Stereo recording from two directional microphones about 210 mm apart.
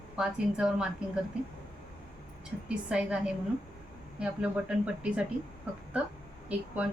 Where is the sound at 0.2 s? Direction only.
5° right (ahead or behind).